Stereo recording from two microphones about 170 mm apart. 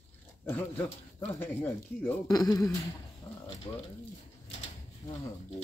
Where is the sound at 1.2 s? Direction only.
10° left (ahead or behind).